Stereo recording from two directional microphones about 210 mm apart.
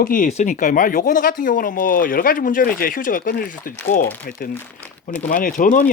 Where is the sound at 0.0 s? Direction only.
40° left (ahead or behind).